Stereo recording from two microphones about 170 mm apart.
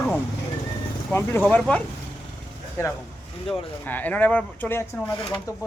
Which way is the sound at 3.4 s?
10° left (ahead or behind).